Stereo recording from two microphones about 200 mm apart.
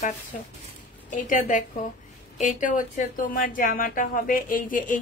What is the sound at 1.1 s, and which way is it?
A woman's voice, 40° left (ahead or behind).